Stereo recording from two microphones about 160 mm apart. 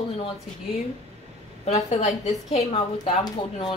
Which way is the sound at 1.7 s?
45° left (ahead or behind).